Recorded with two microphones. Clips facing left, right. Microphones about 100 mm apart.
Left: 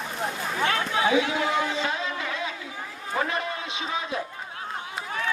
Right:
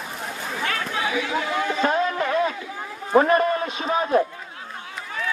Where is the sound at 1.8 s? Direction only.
50° right (ahead or behind).